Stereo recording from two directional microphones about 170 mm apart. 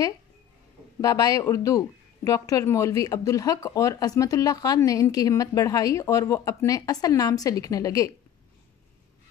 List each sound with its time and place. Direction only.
1.0 s speech: 20° left (ahead or behind)